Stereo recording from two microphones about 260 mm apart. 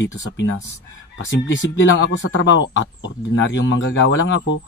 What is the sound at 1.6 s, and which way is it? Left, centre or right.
Speech, left.